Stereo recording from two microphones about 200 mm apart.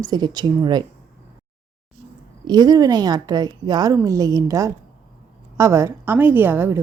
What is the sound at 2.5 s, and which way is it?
A woman's voice, 20° right (ahead or behind).